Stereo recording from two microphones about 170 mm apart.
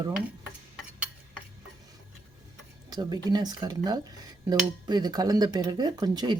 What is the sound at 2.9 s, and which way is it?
Speech, 25° right (ahead or behind).